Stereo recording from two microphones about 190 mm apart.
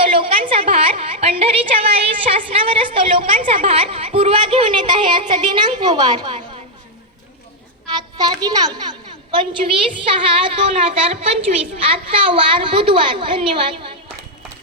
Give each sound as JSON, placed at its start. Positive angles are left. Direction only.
{"t": 0.0, "sound": "a woman's voice", "side_deg": -30}
{"t": 7.9, "sound": "a woman's voice", "side_deg": -20}